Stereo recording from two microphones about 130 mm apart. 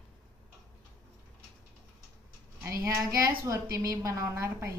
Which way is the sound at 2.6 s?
20° right (ahead or behind).